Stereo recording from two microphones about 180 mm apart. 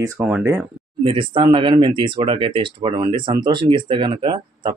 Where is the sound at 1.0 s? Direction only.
30° right (ahead or behind).